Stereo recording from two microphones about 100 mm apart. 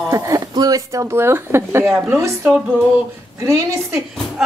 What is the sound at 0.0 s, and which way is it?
Speech, 35° right (ahead or behind).